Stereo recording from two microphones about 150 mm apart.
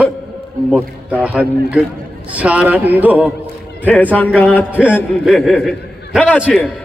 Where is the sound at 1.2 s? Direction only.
5° right (ahead or behind).